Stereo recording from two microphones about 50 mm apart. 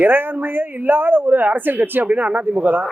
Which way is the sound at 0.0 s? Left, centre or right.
Right.